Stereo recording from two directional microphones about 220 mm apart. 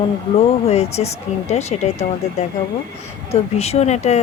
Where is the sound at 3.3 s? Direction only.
30° left (ahead or behind).